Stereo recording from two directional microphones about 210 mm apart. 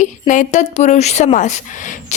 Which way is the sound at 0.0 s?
35° left (ahead or behind).